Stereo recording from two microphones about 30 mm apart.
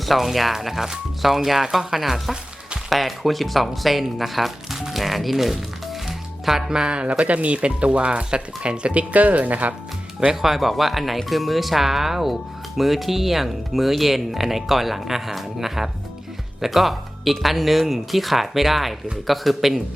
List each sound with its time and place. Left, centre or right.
0.0 s speech: centre
4.8 s music: centre
6.7 s speech: right
7.3 s speech: right
10.4 s speech: centre